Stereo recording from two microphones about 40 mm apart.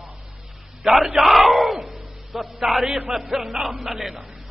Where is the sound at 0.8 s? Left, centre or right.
Centre.